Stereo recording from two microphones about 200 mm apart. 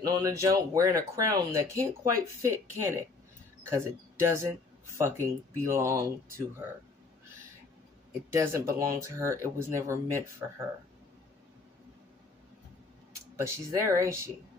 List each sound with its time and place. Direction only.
0.0 s speech: 15° right (ahead or behind)
8.3 s speech: 15° right (ahead or behind)
13.4 s speech: 15° right (ahead or behind)